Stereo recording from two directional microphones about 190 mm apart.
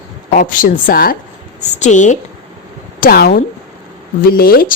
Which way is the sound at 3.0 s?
55° left (ahead or behind).